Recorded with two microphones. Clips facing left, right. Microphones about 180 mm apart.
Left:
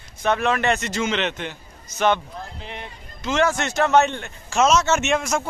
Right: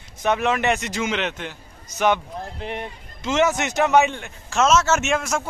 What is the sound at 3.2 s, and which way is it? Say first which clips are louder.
Speech: right 1 dB; 20° right (ahead or behind).